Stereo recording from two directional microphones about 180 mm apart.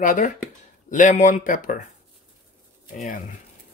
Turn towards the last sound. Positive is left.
turn(degrees=45)  # may be behind; listen again after turning